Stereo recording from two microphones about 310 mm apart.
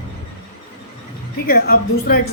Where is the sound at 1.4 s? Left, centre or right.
Left.